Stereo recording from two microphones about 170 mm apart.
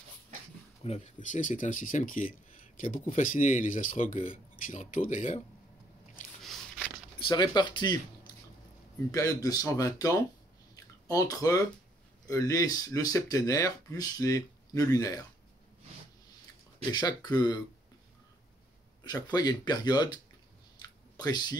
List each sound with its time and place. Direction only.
0.8 s speech: 45° left (ahead or behind)
6.4 s a sound: centre (ahead or behind)
7.2 s speech: 25° left (ahead or behind)
16.9 s speech: 25° left (ahead or behind)
19.0 s speech: 25° left (ahead or behind)
21.2 s speech: 25° left (ahead or behind)